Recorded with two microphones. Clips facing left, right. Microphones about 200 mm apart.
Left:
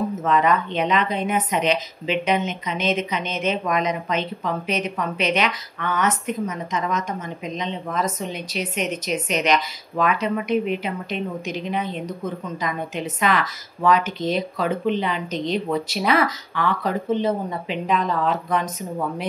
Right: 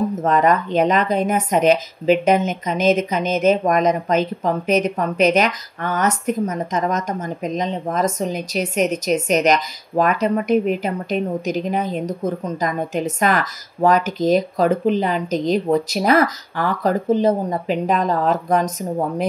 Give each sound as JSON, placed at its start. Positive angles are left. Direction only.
{"t": 0.2, "sound": "a woman's voice", "side_deg": -45}